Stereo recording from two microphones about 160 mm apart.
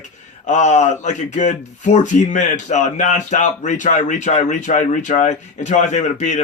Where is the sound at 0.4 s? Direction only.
45° left (ahead or behind).